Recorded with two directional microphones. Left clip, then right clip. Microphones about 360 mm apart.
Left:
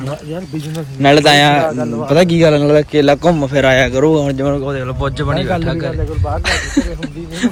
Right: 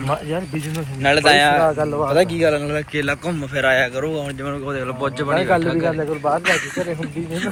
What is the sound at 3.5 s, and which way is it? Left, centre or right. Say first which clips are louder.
Speech: left 2 dB; left.